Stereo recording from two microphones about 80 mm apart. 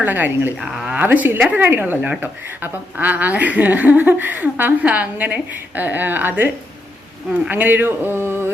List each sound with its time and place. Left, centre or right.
0.0 s a woman's voice: right
0.6 s speech: centre
0.9 s a woman's voice: right
7.5 s a woman's voice: right